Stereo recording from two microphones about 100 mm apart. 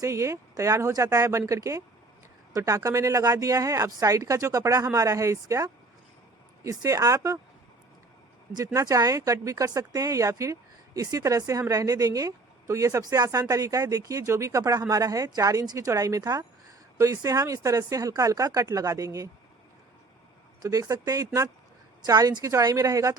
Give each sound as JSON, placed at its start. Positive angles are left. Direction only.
{"t": 0.0, "sound": "speech", "side_deg": -30}
{"t": 8.5, "sound": "speech", "side_deg": -35}
{"t": 20.6, "sound": "speech", "side_deg": -35}